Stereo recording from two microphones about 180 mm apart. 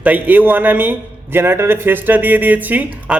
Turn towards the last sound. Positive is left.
turn(degrees=-10)  # may be behind; listen again after turning